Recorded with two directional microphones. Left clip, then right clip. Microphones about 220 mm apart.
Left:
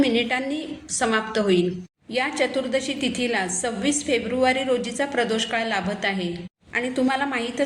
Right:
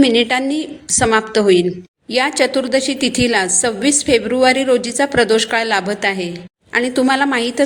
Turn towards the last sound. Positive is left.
turn(degrees=-45)  # may be behind; listen again after turning